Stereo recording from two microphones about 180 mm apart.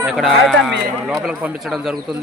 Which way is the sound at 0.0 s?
Centre (ahead or behind).